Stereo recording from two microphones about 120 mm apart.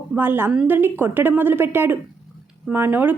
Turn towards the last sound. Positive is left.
turn(degrees=-15)  # may be behind; listen again after turning